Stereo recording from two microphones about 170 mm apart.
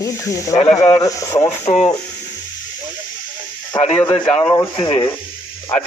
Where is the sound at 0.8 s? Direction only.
40° left (ahead or behind).